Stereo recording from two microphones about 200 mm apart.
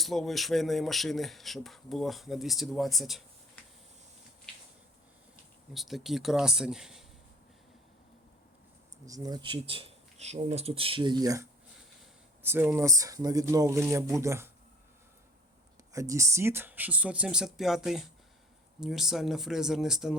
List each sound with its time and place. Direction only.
0.0 s speech: centre (ahead or behind)
5.7 s speech: centre (ahead or behind)
9.0 s speech: 20° right (ahead or behind)
15.9 s speech: 15° right (ahead or behind)